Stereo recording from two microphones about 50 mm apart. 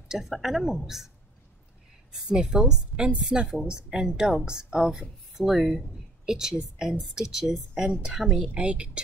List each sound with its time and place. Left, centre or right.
0.3 s a woman's voice: centre
2.1 s a woman's voice: centre
5.4 s a woman's voice: centre
7.9 s a woman's voice: right
8.2 s a woman's voice: centre
8.5 s a woman's voice: right